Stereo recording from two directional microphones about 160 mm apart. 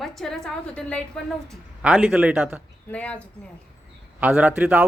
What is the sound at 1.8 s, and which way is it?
Speech, 5° right (ahead or behind).